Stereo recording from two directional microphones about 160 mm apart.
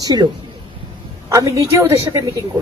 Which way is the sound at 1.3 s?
20° right (ahead or behind).